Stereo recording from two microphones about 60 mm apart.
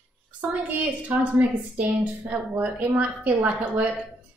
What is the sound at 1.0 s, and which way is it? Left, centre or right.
A woman's voice, right.